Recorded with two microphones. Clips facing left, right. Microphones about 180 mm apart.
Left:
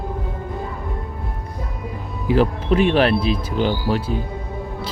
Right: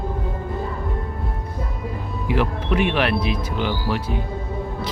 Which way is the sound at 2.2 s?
35° left (ahead or behind).